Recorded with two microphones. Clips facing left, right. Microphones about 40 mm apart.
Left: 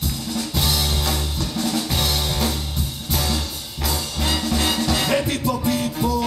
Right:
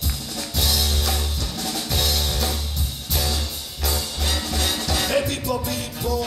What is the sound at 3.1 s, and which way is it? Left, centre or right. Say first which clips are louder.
Music: left 2 dB; centre.